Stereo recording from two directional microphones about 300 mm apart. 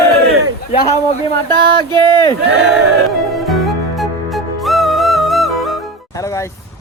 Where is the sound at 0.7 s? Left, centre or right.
Centre.